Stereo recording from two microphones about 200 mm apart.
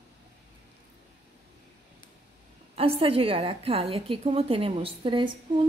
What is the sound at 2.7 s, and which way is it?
A woman's voice, 30° right (ahead or behind).